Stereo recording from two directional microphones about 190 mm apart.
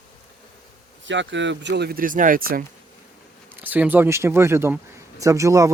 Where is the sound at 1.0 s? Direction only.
70° right (ahead or behind); by 2.6 s 50° right (ahead or behind).